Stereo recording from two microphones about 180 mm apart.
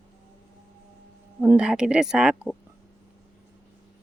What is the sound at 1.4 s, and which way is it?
Speech, 5° right (ahead or behind).